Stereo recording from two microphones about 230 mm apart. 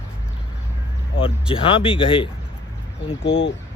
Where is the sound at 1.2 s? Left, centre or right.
Left.